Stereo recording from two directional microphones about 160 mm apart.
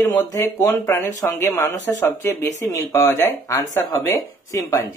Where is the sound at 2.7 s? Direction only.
20° left (ahead or behind).